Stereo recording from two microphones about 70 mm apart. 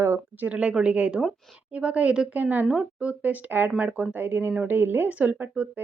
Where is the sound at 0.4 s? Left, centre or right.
Centre.